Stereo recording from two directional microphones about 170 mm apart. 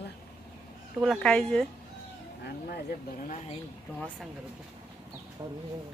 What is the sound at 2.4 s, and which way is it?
Speech, 60° left (ahead or behind).